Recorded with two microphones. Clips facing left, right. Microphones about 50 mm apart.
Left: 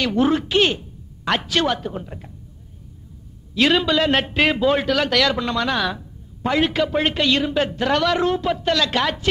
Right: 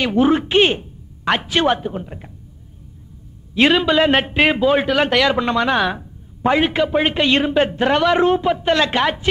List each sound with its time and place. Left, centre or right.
0.0 s speech: centre
3.6 s a man's voice: right
7.2 s a man's voice: right